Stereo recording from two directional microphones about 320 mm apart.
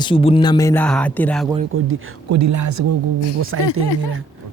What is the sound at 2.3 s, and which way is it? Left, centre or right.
Speech, right.